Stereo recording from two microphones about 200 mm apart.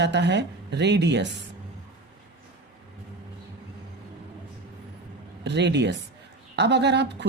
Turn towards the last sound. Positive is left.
turn(degrees=-60)  # may be behind; listen again after turning